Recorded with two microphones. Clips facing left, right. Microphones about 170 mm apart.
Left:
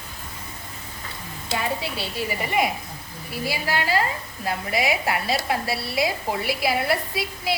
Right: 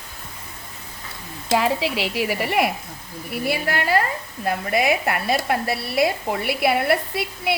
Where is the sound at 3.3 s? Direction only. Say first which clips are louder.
Right 3 dB; 60° right (ahead or behind).